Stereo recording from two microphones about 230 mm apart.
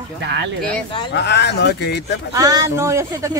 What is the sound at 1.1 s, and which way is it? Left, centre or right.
Speech, left.